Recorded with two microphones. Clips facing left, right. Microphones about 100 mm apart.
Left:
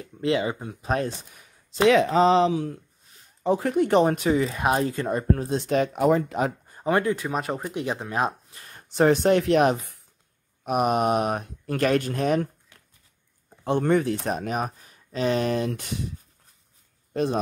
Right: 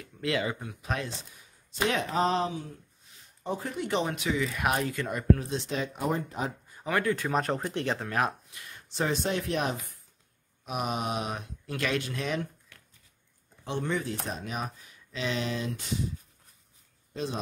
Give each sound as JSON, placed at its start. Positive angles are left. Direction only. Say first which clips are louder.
{"t": 0.0, "sound": "speech", "louder": "left 6 dB", "side_deg": 30}
{"t": 1.3, "sound": "speech", "louder": "left 3 dB", "side_deg": 90}
{"t": 3.7, "sound": "speech", "louder": "left 10 dB", "side_deg": 50}
{"t": 6.7, "sound": "speech", "louder": "left 4 dB", "side_deg": 30}
{"t": 7.2, "sound": "speech", "louder": "left 1 dB", "side_deg": 5}
{"t": 8.5, "sound": "speech", "louder": "left 1 dB", "side_deg": 40}
{"t": 10.6, "sound": "speech", "louder": "left 10 dB", "side_deg": 55}
{"t": 13.7, "sound": "speech", "louder": "left 10 dB", "side_deg": 55}
{"t": 17.1, "sound": "speech", "louder": "left 9 dB", "side_deg": 55}